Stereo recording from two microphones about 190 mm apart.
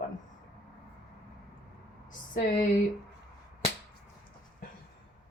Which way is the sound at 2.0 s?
45° left (ahead or behind).